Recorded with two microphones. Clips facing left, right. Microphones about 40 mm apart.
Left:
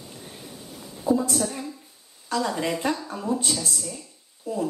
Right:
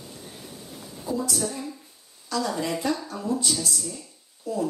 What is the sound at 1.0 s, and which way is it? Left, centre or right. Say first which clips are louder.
A woman's voice: left 5 dB; left.